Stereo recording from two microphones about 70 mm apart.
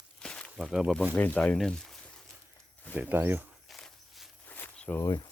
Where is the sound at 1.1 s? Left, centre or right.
Left.